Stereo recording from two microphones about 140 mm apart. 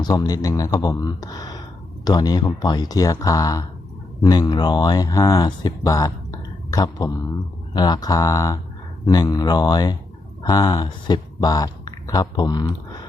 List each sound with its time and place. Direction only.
0.0 s speech: 25° left (ahead or behind)